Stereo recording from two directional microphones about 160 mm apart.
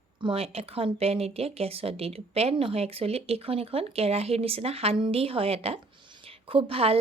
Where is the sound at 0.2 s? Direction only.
35° right (ahead or behind).